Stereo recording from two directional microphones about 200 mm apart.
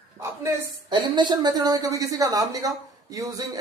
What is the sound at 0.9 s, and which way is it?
A woman's voice, 20° right (ahead or behind).